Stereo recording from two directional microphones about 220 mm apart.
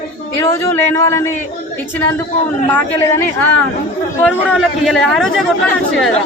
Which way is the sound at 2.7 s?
10° left (ahead or behind).